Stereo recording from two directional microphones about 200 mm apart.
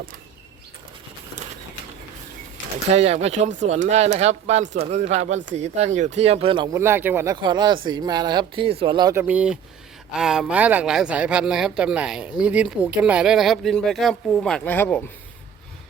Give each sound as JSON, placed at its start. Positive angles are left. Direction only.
{"t": 2.9, "sound": "speech", "side_deg": -30}
{"t": 6.7, "sound": "speech", "side_deg": -10}
{"t": 7.3, "sound": "speech", "side_deg": -20}
{"t": 9.2, "sound": "speech", "side_deg": -5}